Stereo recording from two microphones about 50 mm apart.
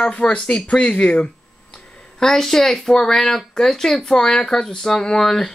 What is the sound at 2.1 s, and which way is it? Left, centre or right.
Speech, centre.